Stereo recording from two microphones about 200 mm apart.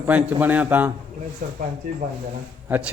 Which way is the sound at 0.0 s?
5° right (ahead or behind).